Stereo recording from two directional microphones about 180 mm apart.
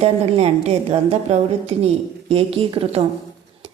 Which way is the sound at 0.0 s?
35° right (ahead or behind).